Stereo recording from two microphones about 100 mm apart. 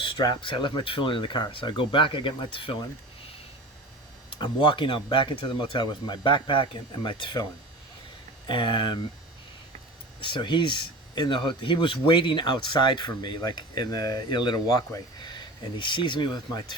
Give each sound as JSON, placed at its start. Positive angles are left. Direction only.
{"t": 0.2, "sound": "speech", "side_deg": 45}
{"t": 4.3, "sound": "speech", "side_deg": 55}
{"t": 8.4, "sound": "speech", "side_deg": 50}
{"t": 10.2, "sound": "speech", "side_deg": 55}